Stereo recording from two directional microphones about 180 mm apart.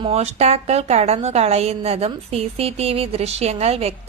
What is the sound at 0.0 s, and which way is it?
A woman's voice, 35° right (ahead or behind).